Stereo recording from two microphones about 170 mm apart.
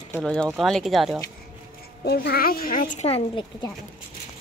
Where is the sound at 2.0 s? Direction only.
70° left (ahead or behind); by 3.1 s 50° left (ahead or behind).